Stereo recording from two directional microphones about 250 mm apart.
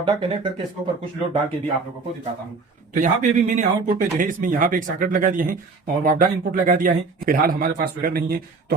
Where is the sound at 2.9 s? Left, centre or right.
Right.